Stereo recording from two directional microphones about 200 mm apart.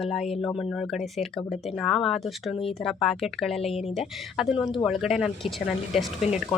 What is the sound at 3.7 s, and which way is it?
Speech, 30° left (ahead or behind).